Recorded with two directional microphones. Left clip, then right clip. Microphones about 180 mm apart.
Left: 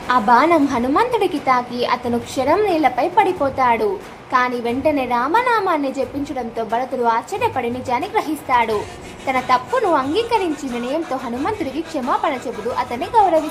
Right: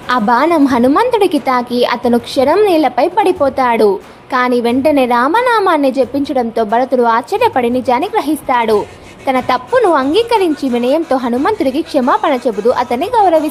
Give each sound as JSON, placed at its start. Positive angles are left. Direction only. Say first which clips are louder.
{"t": 0.1, "sound": "a woman's voice", "louder": "right 2 dB", "side_deg": -40}